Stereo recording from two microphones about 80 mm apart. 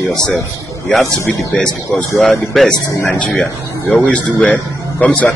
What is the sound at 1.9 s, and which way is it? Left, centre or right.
Speech, centre.